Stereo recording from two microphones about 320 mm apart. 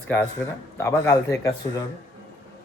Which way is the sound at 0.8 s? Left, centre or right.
Centre.